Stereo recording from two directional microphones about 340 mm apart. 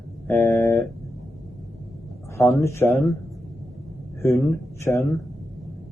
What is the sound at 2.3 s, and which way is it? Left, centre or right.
Speech, centre.